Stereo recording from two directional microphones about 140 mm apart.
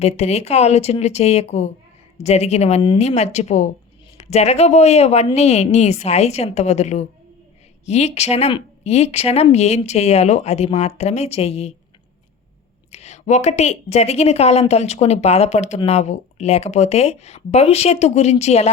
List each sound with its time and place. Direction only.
0.0 s speech: 50° left (ahead or behind)
12.9 s speech: 50° left (ahead or behind)